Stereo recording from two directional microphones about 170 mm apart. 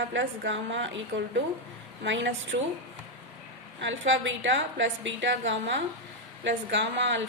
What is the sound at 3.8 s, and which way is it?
A woman's voice, 90° right.